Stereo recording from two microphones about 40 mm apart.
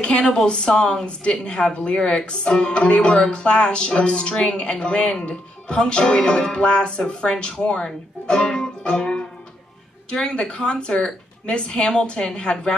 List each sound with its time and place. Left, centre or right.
0.0 s speech: left
0.5 s music: left
7.6 s speech: left
10.4 s music: left